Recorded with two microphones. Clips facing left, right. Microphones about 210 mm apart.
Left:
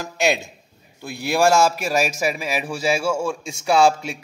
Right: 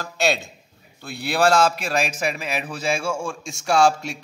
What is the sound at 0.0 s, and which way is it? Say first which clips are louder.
A man's voice: left 2 dB; 10° left (ahead or behind).